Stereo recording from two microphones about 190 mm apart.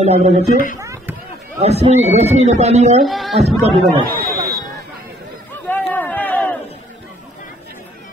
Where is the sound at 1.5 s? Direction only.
35° right (ahead or behind).